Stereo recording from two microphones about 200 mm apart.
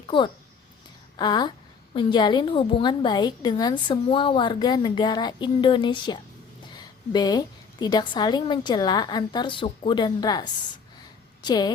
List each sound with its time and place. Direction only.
1.1 s a woman's voice: 20° left (ahead or behind)